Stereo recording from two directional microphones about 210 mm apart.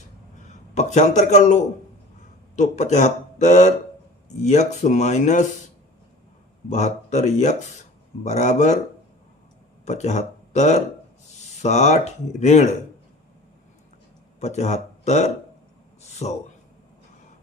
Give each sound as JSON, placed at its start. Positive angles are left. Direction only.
{"t": 0.4, "sound": "a man's voice", "side_deg": 35}
{"t": 6.7, "sound": "speech", "side_deg": 35}
{"t": 9.8, "sound": "speech", "side_deg": 35}
{"t": 14.3, "sound": "speech", "side_deg": 35}